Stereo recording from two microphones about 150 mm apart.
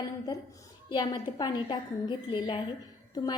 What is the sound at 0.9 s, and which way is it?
A woman's voice, 30° left (ahead or behind).